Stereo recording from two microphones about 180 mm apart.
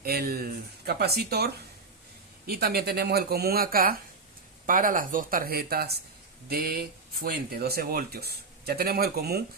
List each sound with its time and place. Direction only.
0.0 s speech: 55° right (ahead or behind)